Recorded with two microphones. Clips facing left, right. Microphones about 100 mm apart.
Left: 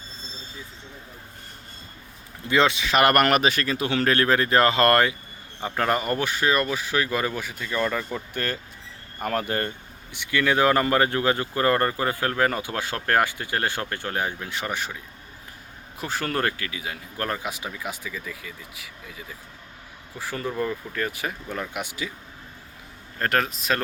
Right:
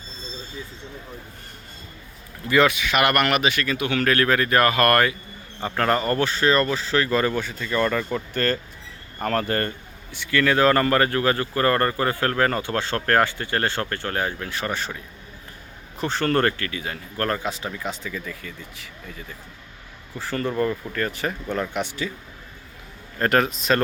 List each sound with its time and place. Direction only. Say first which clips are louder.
2.5 s speech: right 2 dB; 25° left (ahead or behind)
5.6 s speech: right 2 dB; 10° left (ahead or behind)
16.0 s speech: right 5 dB; 5° left (ahead or behind)
23.2 s speech: right 4 dB; centre (ahead or behind)